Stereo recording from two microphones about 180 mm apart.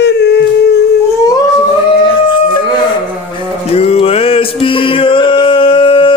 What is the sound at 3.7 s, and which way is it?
Music, 35° left (ahead or behind).